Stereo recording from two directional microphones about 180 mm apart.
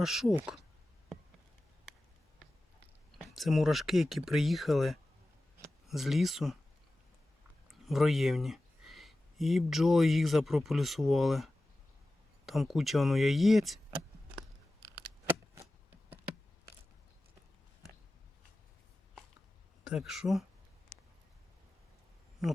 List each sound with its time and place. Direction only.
0.0 s speech: centre (ahead or behind)
3.2 s speech: centre (ahead or behind)
7.7 s speech: centre (ahead or behind)
19.8 s speech: 5° right (ahead or behind)